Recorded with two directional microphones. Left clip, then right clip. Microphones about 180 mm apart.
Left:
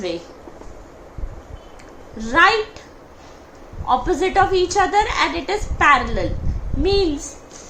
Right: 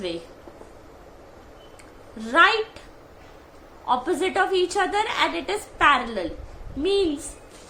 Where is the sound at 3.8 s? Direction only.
20° right (ahead or behind).